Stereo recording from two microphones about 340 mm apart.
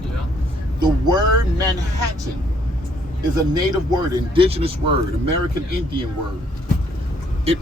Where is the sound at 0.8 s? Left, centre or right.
Centre.